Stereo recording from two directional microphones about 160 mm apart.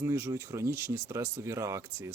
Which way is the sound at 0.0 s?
15° right (ahead or behind).